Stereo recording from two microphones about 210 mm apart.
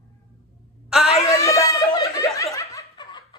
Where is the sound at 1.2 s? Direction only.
15° left (ahead or behind).